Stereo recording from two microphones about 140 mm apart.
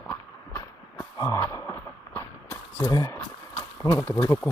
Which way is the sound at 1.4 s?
20° left (ahead or behind).